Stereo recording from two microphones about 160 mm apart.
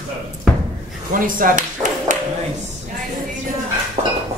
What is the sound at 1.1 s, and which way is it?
Speech, 60° right (ahead or behind).